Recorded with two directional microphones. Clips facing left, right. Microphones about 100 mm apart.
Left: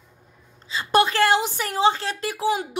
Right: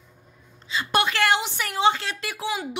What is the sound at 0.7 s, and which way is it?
A woman's voice, 35° left (ahead or behind).